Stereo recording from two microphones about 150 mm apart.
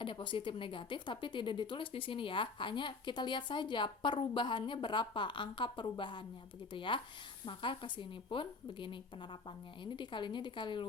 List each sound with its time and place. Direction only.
0.0 s speech: 35° left (ahead or behind)